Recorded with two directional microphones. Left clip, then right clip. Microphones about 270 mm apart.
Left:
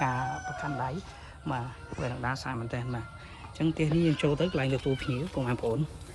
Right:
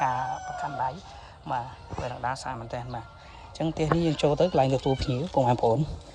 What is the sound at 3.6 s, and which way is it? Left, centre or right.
Speech, right.